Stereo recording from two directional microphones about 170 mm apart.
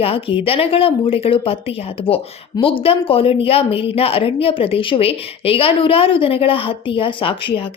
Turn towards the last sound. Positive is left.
turn(degrees=30)  # may be behind; listen again after turning